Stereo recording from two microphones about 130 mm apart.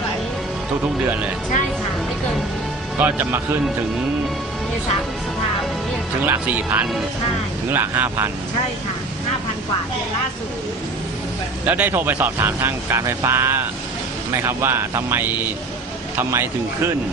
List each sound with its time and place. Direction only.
3.0 s speech: 15° right (ahead or behind)
6.2 s speech: 15° right (ahead or behind)
11.6 s speech: 15° right (ahead or behind)